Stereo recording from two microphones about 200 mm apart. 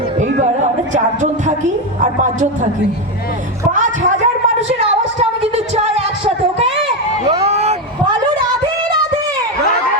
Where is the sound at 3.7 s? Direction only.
40° right (ahead or behind).